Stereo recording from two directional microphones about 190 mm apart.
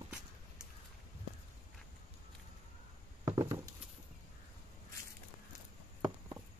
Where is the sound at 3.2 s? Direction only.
20° right (ahead or behind).